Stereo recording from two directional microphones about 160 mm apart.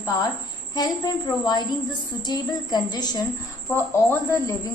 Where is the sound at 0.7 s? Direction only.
25° left (ahead or behind).